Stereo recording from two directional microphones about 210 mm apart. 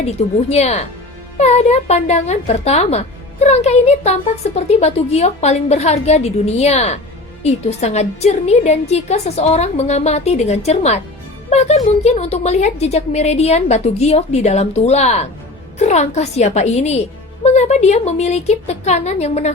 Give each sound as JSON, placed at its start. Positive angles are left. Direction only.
{"t": 0.0, "sound": "a woman's voice", "side_deg": 30}